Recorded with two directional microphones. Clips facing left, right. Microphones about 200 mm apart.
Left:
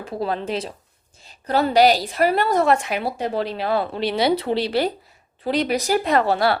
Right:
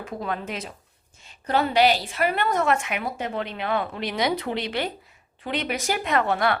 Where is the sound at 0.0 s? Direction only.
30° left (ahead or behind).